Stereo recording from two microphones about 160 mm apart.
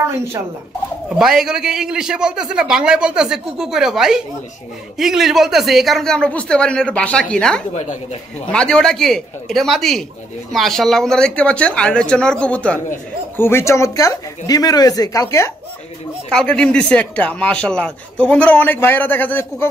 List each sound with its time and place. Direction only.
1.0 s a man's voice: 5° right (ahead or behind)
7.7 s speech: 45° left (ahead or behind)
8.5 s a man's voice: 5° left (ahead or behind)
16.3 s speech: 5° left (ahead or behind)